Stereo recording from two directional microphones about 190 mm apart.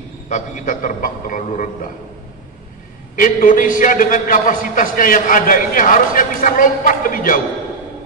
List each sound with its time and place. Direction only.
0.3 s a man's voice: 40° left (ahead or behind)
3.2 s a man's voice: 45° left (ahead or behind)